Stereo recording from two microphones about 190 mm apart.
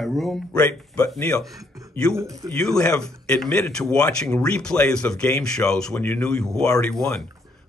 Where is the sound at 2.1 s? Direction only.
15° right (ahead or behind).